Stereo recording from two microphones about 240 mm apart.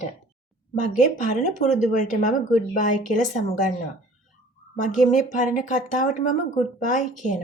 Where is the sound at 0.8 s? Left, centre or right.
Left.